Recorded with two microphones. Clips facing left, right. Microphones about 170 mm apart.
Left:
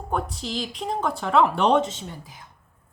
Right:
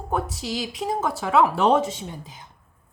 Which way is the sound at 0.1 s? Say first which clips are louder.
Right 1 dB; 5° right (ahead or behind).